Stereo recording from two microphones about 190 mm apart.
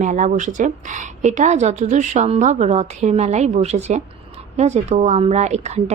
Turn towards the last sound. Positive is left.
turn(degrees=-35)  # may be behind; listen again after turning